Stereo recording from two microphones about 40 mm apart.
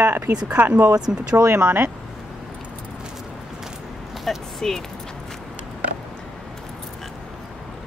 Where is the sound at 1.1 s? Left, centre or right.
Right.